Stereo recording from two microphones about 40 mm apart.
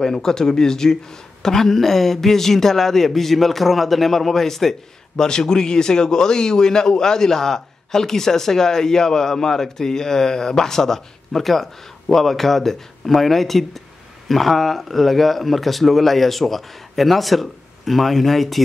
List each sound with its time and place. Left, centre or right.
0.0 s speech: centre